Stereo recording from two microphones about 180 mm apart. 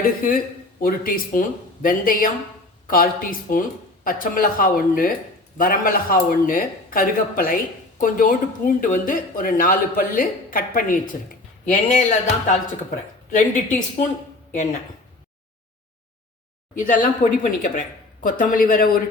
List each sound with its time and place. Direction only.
0.2 s speech: 50° left (ahead or behind)
16.7 s speech: 45° left (ahead or behind)